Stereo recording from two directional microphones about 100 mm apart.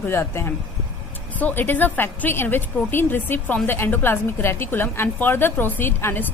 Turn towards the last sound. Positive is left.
turn(degrees=25)  # may be behind; listen again after turning